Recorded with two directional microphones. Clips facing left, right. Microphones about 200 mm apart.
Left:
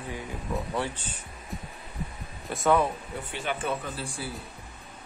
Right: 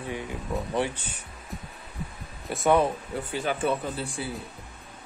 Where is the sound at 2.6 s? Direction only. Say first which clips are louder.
Right 2 dB; 25° right (ahead or behind).